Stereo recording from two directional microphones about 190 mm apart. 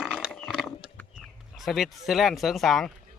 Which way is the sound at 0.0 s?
Centre (ahead or behind).